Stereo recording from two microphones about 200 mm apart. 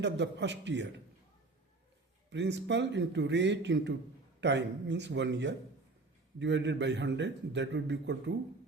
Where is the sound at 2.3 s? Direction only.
60° right (ahead or behind).